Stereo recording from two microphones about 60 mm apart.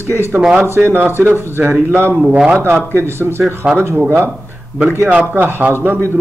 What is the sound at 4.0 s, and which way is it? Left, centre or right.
Speech, right.